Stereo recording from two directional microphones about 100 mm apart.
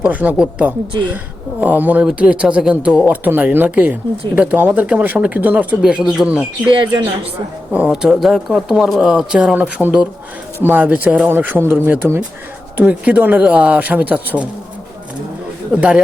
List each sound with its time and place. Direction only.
0.0 s speech: 15° right (ahead or behind)
6.7 s speech: 55° right (ahead or behind)
7.7 s speech: 10° right (ahead or behind)
12.7 s speech: 15° right (ahead or behind)
15.7 s speech: 10° right (ahead or behind)